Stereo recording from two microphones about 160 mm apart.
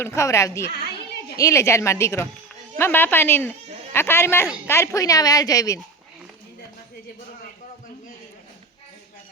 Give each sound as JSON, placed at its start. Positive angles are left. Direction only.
{"t": 0.0, "sound": "a woman's voice", "side_deg": 15}